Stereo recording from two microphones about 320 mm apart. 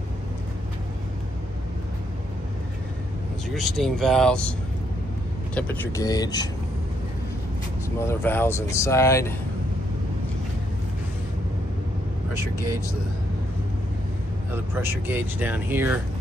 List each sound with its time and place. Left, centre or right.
3.4 s speech: centre
8.1 s speech: centre
12.5 s speech: centre
14.5 s speech: centre